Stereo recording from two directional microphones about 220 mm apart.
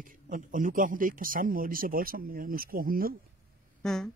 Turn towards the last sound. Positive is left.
turn(degrees=0)  # may be behind; listen again after turning